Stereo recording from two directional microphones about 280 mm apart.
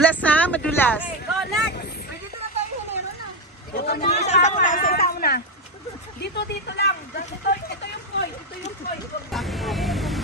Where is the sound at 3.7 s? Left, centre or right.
Left.